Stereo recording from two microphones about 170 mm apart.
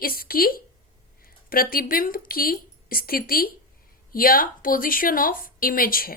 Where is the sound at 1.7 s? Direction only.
60° left (ahead or behind).